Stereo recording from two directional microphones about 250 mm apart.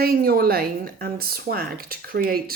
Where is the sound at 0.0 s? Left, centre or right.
Right.